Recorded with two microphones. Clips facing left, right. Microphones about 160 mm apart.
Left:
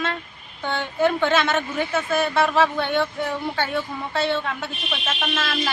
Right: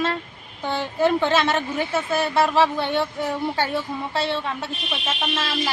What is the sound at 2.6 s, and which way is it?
Speech, 30° right (ahead or behind).